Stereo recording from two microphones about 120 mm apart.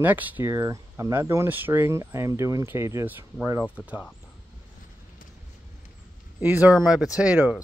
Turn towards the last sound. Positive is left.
turn(degrees=-10)  # may be behind; listen again after turning